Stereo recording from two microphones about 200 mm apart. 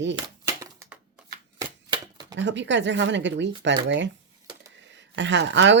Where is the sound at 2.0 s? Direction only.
20° right (ahead or behind).